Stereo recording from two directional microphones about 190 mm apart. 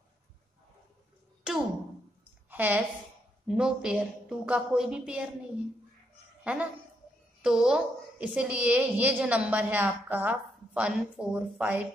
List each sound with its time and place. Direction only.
2.5 s a woman's voice: 10° right (ahead or behind)
6.4 s a woman's voice: 5° right (ahead or behind)